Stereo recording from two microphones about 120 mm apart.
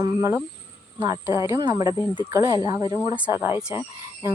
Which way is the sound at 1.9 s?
35° left (ahead or behind).